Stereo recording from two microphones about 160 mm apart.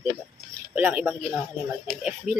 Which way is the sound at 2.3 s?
55° right (ahead or behind).